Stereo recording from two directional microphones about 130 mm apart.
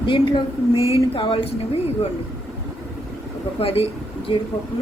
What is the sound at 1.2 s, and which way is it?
Speech, 45° left (ahead or behind).